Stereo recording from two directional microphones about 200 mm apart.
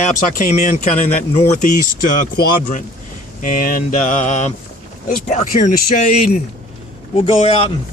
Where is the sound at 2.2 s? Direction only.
40° left (ahead or behind).